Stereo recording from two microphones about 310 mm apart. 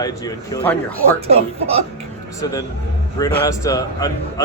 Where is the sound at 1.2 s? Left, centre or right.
Centre.